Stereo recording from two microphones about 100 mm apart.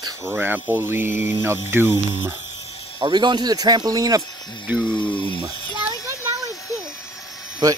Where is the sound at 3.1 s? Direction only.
45° right (ahead or behind).